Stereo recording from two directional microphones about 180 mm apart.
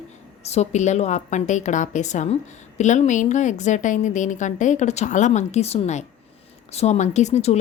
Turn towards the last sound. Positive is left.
turn(degrees=40)  # may be behind; listen again after turning